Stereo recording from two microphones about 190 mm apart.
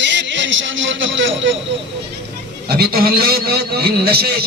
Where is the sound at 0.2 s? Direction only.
80° right.